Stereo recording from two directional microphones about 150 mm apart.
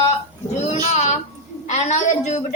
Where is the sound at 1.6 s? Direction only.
50° left (ahead or behind).